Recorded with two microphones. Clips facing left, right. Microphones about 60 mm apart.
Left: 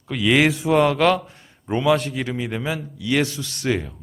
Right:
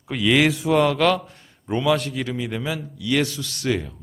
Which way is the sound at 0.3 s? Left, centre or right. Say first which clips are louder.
Left 1 dB; left.